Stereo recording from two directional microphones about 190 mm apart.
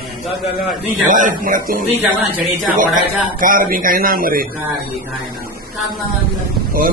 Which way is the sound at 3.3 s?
45° right (ahead or behind).